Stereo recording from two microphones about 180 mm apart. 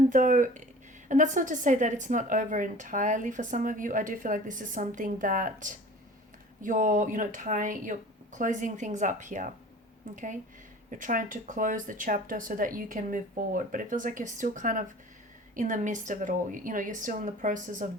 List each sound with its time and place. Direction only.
0.1 s a woman's voice: 45° right (ahead or behind)
10.9 s a woman's voice: 45° right (ahead or behind)